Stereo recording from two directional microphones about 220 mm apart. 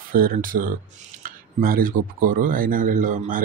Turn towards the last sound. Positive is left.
turn(degrees=-35)  # may be behind; listen again after turning